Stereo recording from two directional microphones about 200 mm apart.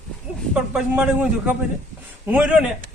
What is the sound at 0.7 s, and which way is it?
A man's voice, 5° right (ahead or behind).